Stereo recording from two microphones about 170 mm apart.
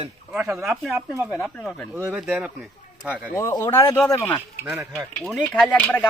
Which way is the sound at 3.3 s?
15° left (ahead or behind).